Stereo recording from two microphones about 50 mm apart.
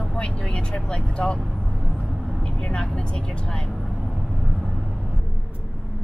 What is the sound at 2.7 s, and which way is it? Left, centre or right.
Speech, centre.